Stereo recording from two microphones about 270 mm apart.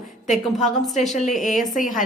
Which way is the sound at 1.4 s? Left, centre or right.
Left.